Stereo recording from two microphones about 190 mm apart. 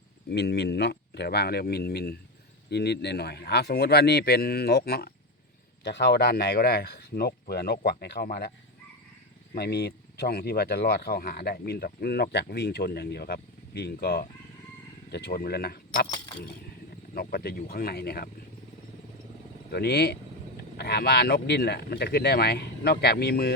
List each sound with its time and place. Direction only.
0.3 s speech: 60° left (ahead or behind)
9.6 s speech: 60° left (ahead or behind)
17.2 s speech: 50° left (ahead or behind)
19.7 s speech: 55° left (ahead or behind)